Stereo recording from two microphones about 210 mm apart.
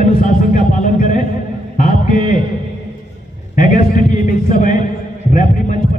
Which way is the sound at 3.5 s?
40° left (ahead or behind).